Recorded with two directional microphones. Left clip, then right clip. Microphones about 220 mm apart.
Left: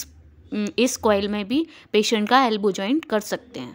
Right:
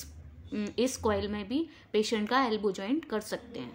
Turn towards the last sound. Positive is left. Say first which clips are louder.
# left 10 dB
turn(degrees=35)  # may be behind; listen again after turning